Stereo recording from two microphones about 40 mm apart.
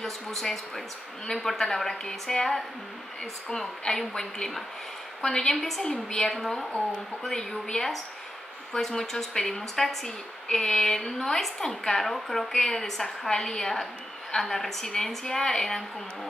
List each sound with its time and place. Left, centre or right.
0.0 s a woman's voice: centre